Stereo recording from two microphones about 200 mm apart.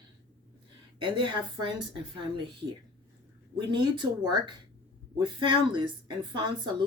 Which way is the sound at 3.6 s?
20° right (ahead or behind).